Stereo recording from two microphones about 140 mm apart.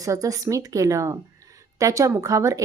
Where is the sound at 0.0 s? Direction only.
25° right (ahead or behind).